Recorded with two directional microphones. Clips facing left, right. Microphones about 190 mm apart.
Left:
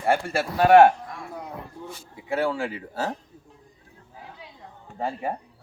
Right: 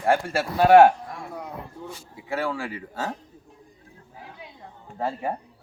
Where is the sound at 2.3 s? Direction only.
Centre (ahead or behind).